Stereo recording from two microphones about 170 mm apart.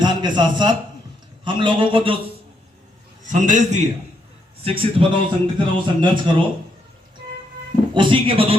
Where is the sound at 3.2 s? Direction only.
45° right (ahead or behind).